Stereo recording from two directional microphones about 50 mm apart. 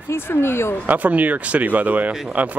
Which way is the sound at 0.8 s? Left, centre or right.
Right.